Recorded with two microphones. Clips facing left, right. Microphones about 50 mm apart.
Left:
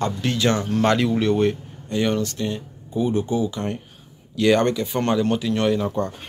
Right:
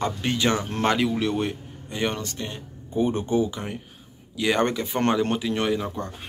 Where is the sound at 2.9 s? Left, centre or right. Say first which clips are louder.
Left 1 dB; right.